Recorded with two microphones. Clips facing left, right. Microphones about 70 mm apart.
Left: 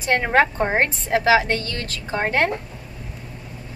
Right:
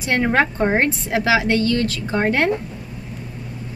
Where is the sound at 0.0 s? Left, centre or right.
Left.